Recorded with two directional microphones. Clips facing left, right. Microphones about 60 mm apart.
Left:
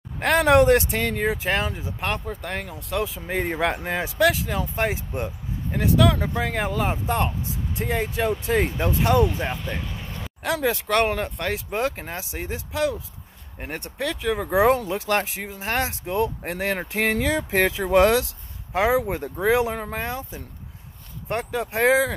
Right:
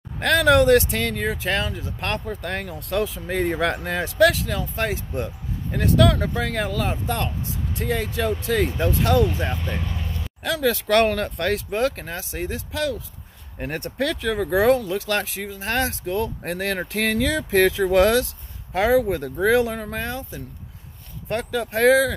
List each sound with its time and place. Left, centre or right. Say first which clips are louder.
0.2 s speech: even; left
2.2 s speech: right 2 dB; centre
9.7 s speech: right 2 dB; centre
10.4 s speech: right 1 dB; left
11.7 s speech: right 2 dB; centre
13.6 s speech: right 4 dB; centre; by 22.1 s left